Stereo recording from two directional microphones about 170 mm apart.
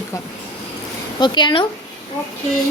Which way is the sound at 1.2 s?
25° left (ahead or behind).